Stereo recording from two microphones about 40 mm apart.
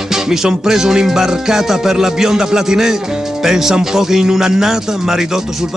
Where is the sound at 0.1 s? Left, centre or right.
Centre.